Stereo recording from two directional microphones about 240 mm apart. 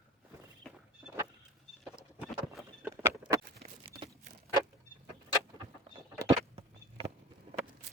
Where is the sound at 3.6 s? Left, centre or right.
Right.